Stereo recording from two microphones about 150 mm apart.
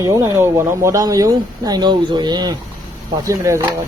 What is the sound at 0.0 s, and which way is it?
Speech, 20° right (ahead or behind).